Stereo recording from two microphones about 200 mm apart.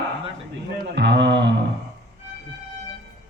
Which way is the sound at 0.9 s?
60° right (ahead or behind).